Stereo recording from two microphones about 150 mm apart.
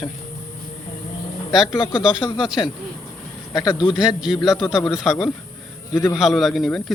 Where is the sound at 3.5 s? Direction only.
30° left (ahead or behind).